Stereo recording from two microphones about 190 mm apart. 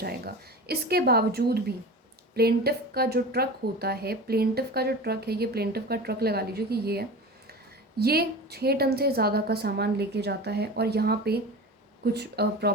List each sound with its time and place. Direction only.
0.0 s a woman's voice: 55° right (ahead or behind)